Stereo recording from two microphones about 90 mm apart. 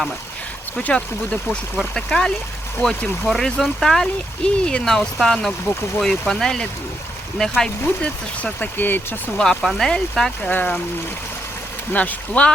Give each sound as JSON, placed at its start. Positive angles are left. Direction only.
{"t": 0.8, "sound": "speech", "side_deg": 10}
{"t": 9.4, "sound": "speech", "side_deg": 5}
{"t": 10.5, "sound": "speech", "side_deg": 20}
{"t": 11.9, "sound": "speech", "side_deg": 15}